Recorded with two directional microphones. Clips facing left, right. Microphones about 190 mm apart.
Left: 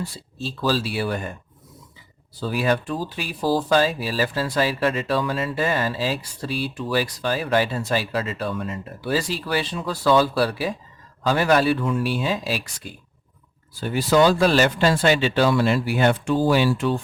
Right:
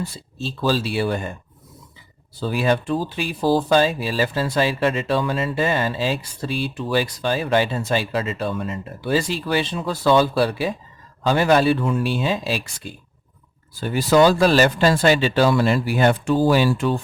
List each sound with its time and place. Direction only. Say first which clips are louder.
0.0 s speech: right 2 dB; 25° right (ahead or behind)
2.4 s speech: right 2 dB; 25° right (ahead or behind)
13.9 s speech: right 2 dB; 45° right (ahead or behind)